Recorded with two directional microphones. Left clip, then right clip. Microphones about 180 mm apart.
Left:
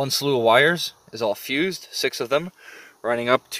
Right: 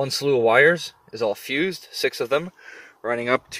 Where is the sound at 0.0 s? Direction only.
20° left (ahead or behind).